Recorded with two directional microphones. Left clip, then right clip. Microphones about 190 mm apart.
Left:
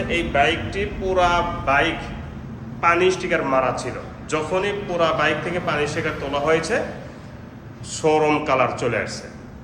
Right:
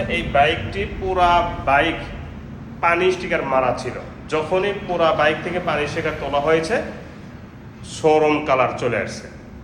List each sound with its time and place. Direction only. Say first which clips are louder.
0.1 s a man's voice: right 2 dB; centre (ahead or behind)
8.0 s a man's voice: right 2 dB; 5° left (ahead or behind)